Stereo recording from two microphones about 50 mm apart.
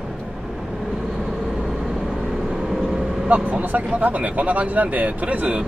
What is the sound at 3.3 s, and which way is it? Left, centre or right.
Speech, right.